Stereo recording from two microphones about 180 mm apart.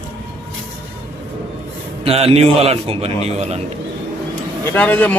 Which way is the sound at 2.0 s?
35° right (ahead or behind).